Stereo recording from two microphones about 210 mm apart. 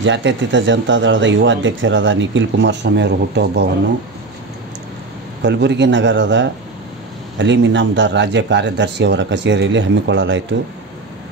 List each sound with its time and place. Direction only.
0.0 s speech: 60° right (ahead or behind)
5.4 s speech: 55° right (ahead or behind)